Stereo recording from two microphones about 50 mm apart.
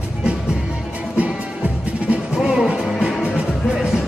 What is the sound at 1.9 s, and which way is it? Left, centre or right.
Music, right.